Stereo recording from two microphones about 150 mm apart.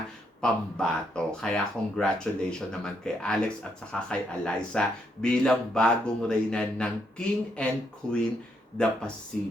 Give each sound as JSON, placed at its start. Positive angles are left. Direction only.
{"t": 0.4, "sound": "speech", "side_deg": 5}